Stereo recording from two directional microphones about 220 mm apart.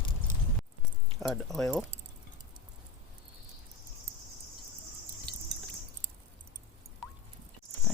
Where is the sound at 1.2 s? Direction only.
Centre (ahead or behind).